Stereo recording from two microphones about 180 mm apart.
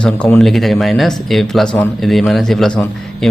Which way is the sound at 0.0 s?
5° left (ahead or behind).